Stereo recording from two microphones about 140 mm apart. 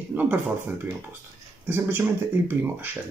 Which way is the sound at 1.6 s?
15° right (ahead or behind).